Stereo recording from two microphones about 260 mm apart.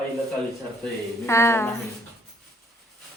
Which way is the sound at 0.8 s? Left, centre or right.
Centre.